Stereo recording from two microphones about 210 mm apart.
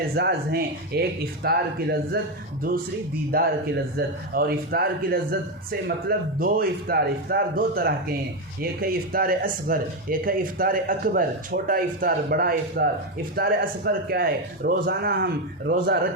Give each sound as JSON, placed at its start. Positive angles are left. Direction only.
{"t": 0.2, "sound": "speech", "side_deg": -50}
{"t": 3.3, "sound": "speech", "side_deg": -45}